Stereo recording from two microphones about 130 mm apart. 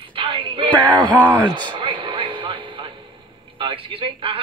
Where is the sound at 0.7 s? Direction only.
10° left (ahead or behind).